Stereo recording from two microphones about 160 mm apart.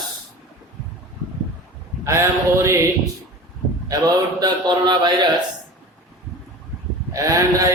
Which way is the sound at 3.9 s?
25° right (ahead or behind).